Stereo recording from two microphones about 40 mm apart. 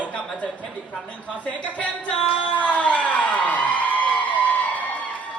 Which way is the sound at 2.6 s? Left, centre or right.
Left.